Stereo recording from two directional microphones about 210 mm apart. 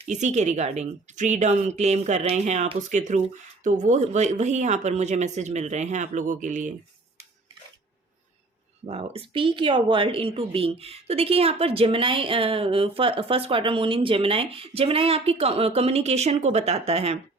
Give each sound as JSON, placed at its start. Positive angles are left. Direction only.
{"t": 0.0, "sound": "a woman's voice", "side_deg": -35}
{"t": 8.9, "sound": "speech", "side_deg": -25}